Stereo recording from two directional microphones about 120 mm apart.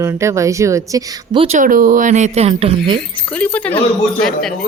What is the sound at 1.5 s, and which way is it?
Speech, 90° right.